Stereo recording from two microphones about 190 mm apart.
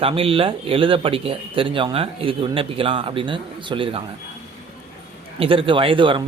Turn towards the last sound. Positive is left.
turn(degrees=-25)  # may be behind; listen again after turning